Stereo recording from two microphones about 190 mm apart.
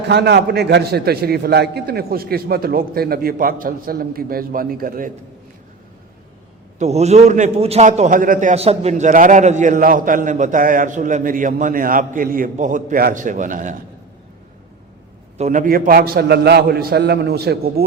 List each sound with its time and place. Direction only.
0.1 s a man's voice: 60° right (ahead or behind)
6.7 s a man's voice: 35° right (ahead or behind)
15.4 s a man's voice: 40° right (ahead or behind); by 17.8 s 55° right (ahead or behind)